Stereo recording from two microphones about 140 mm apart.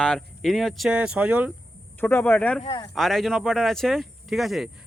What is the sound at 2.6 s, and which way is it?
Speech, 30° left (ahead or behind).